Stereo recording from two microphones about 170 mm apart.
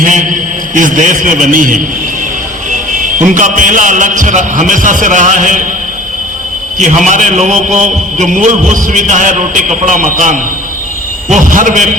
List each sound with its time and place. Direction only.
0.0 s a man's voice: 50° right (ahead or behind)
3.3 s a man's voice: 50° right (ahead or behind)
6.7 s a man's voice: 45° right (ahead or behind)